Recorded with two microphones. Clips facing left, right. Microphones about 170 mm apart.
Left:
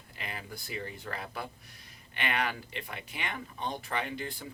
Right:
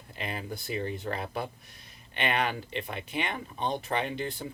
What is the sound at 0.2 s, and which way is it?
Speech, 25° right (ahead or behind).